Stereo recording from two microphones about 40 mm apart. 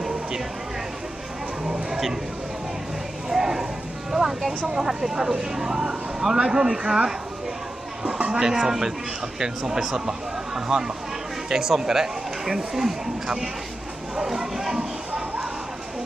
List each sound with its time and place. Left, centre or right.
1.6 s a sound: centre
3.2 s clip-clop: centre
4.1 s a sound: centre
4.6 s speech: centre
8.3 s speech: centre
14.2 s bow-wow: centre